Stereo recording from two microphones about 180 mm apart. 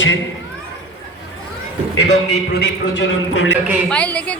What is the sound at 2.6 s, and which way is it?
Speech, 90° left.